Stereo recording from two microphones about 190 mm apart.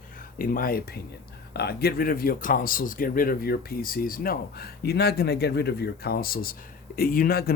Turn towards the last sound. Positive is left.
turn(degrees=50)  # may be behind; listen again after turning